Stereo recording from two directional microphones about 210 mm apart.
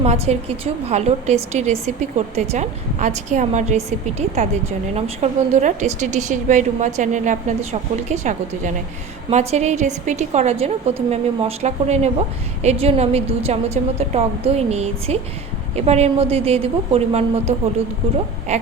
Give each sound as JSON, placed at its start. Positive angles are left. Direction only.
{"t": 0.0, "sound": "a woman's voice", "side_deg": -30}